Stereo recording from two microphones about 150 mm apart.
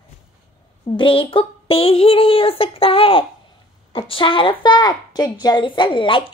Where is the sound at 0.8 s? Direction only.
35° left (ahead or behind).